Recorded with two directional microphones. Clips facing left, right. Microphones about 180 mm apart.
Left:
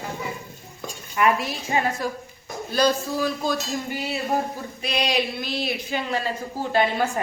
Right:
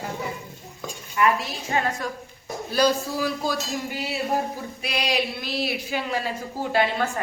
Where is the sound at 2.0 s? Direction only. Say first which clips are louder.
Left 3 dB; 5° left (ahead or behind).